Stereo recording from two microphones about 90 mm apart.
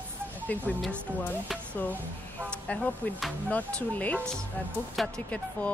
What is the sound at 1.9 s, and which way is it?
Speech, 20° right (ahead or behind).